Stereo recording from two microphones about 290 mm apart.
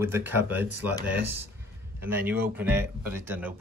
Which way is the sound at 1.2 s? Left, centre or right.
Right.